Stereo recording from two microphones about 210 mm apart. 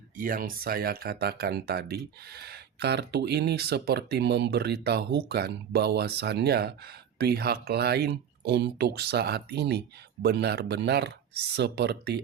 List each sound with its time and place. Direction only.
0.2 s speech: 40° right (ahead or behind)